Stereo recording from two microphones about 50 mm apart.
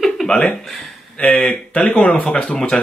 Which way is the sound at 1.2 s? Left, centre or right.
Left.